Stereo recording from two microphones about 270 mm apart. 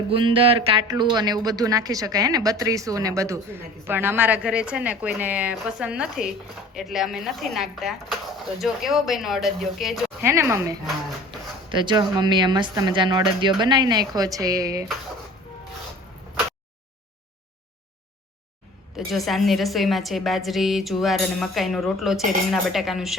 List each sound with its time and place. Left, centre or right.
0.1 s speech: centre
18.9 s speech: centre